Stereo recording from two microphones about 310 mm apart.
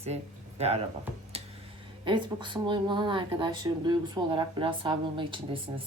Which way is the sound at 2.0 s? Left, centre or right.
Centre.